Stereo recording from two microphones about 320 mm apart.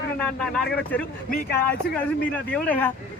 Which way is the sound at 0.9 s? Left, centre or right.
Centre.